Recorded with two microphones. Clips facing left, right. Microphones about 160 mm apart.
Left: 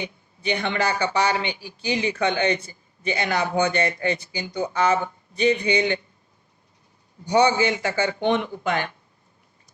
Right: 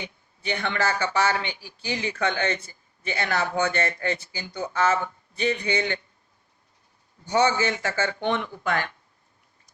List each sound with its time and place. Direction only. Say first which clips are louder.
0.0 s speech: left 5 dB; 20° left (ahead or behind)
7.3 s speech: left 3 dB; 15° left (ahead or behind)